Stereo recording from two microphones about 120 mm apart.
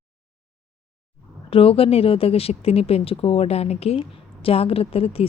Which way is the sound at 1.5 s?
50° left (ahead or behind).